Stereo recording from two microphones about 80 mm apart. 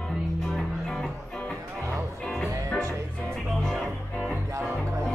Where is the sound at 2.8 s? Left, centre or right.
Right.